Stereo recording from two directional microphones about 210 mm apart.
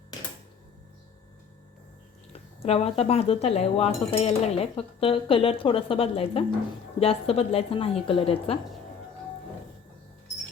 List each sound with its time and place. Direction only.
2.6 s speech: 30° left (ahead or behind)